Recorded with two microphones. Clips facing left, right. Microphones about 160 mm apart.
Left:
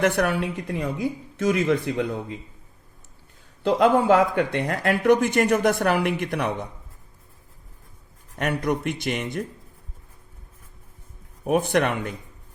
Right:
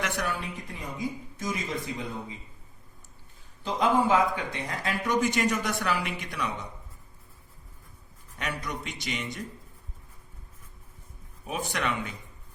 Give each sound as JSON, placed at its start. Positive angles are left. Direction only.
{"t": 0.0, "sound": "speech", "side_deg": 60}
{"t": 3.6, "sound": "speech", "side_deg": 70}
{"t": 8.4, "sound": "speech", "side_deg": 55}
{"t": 11.4, "sound": "speech", "side_deg": 60}